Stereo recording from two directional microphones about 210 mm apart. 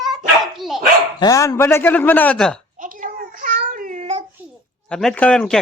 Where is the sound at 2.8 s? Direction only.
40° right (ahead or behind).